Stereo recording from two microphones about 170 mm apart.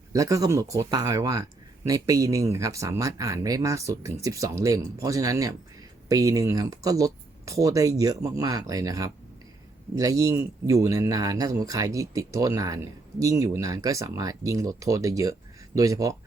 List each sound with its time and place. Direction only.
0.1 s speech: 20° right (ahead or behind)